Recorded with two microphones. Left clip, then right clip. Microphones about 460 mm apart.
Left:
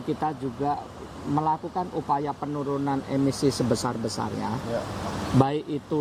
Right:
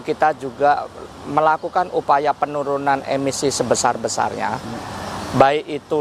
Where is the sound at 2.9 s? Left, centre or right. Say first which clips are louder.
Right 9 dB; right.